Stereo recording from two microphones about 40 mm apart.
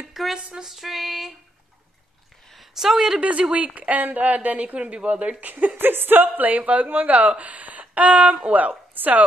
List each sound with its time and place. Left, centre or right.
0.4 s speech: right
0.7 s female singing: centre
2.8 s a woman's voice: centre
3.2 s a woman's voice: right
5.8 s a woman's voice: right
7.8 s a sound: right
8.5 s a woman's voice: right